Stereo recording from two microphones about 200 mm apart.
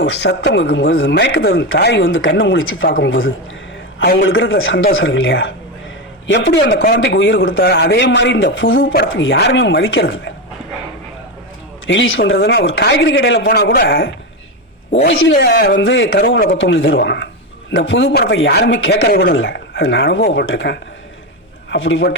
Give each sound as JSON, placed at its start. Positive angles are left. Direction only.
{"t": 0.0, "sound": "a man's voice", "side_deg": 60}
{"t": 4.0, "sound": "speech", "side_deg": 50}
{"t": 4.3, "sound": "a man's voice", "side_deg": 80}
{"t": 8.5, "sound": "a man's voice", "side_deg": 75}
{"t": 8.9, "sound": "a man's voice", "side_deg": 60}
{"t": 11.9, "sound": "a man's voice", "side_deg": 70}
{"t": 12.2, "sound": "a man's voice", "side_deg": 55}
{"t": 15.0, "sound": "a man's voice", "side_deg": 75}
{"t": 15.4, "sound": "a man's voice", "side_deg": 55}
{"t": 16.2, "sound": "speech", "side_deg": 45}
{"t": 16.6, "sound": "a man's voice", "side_deg": 65}
{"t": 18.1, "sound": "a man's voice", "side_deg": 50}
{"t": 20.2, "sound": "speech", "side_deg": 50}
{"t": 20.5, "sound": "a man's voice", "side_deg": 70}